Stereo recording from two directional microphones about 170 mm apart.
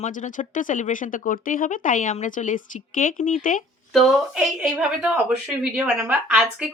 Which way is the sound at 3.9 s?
Centre (ahead or behind).